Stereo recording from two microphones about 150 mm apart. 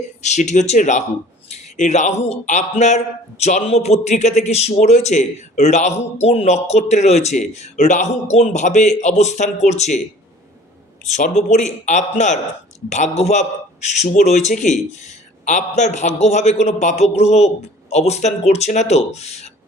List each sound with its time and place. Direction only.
0.0 s a man's voice: 50° left (ahead or behind)
11.0 s a man's voice: 50° left (ahead or behind)